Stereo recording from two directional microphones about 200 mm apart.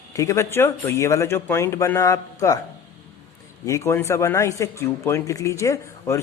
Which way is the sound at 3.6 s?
15° left (ahead or behind).